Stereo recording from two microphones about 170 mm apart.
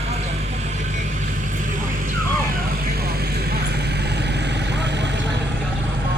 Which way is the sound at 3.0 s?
65° right (ahead or behind).